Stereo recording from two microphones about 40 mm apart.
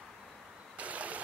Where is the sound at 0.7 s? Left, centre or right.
Right.